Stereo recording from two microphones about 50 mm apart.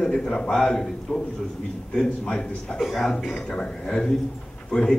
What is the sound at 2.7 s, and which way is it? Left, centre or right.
A man's voice, centre.